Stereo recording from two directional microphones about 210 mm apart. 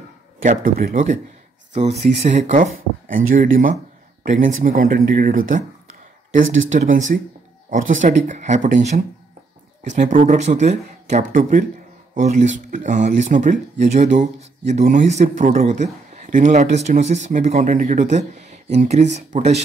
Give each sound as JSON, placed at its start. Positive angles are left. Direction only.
{"t": 0.4, "sound": "speech", "side_deg": -40}
{"t": 6.4, "sound": "speech", "side_deg": -65}
{"t": 6.7, "sound": "speech", "side_deg": -35}